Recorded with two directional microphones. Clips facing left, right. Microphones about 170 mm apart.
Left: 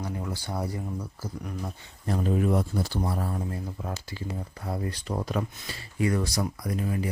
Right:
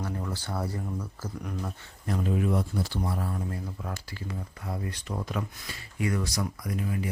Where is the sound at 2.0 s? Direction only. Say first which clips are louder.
Left 2 dB; 35° left (ahead or behind).